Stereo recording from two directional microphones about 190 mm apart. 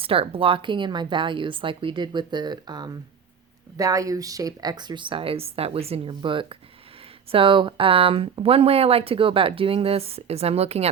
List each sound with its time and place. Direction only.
0.0 s speech: 30° right (ahead or behind)